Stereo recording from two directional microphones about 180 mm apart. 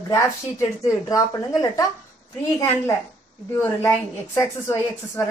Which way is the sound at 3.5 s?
15° left (ahead or behind).